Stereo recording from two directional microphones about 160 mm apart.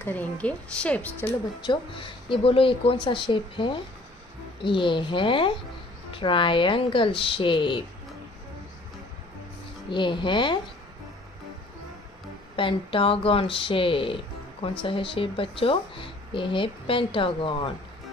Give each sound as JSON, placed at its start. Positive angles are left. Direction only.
{"t": 0.0, "sound": "a woman's voice", "side_deg": 10}
{"t": 1.6, "sound": "speech", "side_deg": 30}
{"t": 9.8, "sound": "speech", "side_deg": 30}
{"t": 12.5, "sound": "speech", "side_deg": 30}